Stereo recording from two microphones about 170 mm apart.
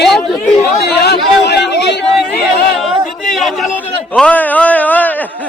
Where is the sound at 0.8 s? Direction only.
75° left (ahead or behind).